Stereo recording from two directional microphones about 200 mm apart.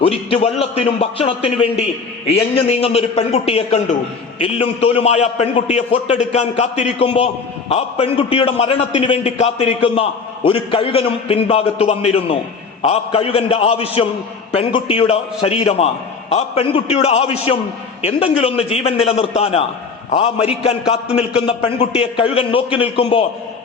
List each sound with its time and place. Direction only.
0.0 s a man's voice: 30° left (ahead or behind)